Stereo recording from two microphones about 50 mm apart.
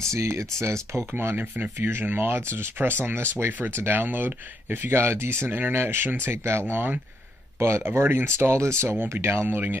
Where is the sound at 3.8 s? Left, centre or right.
Right.